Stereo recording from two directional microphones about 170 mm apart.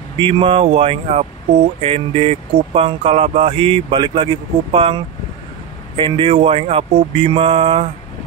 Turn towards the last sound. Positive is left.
turn(degrees=-35)  # may be behind; listen again after turning